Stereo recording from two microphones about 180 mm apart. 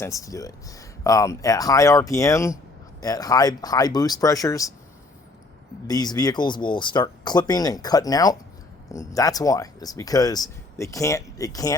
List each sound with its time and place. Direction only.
0.0 s speech: 20° left (ahead or behind)
5.9 s speech: 20° left (ahead or behind)